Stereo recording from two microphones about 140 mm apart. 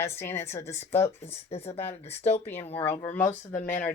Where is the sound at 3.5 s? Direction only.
65° left (ahead or behind).